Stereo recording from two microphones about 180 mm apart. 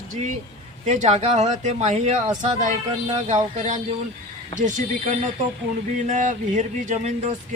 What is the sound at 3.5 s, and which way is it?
Speech, 40° right (ahead or behind).